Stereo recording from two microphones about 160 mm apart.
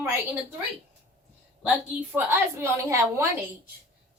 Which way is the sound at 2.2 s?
15° right (ahead or behind).